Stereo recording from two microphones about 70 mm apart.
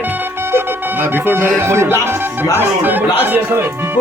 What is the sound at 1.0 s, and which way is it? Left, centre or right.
Speech, right.